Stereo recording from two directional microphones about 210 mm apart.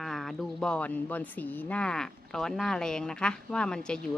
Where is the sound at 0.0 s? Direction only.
Centre (ahead or behind).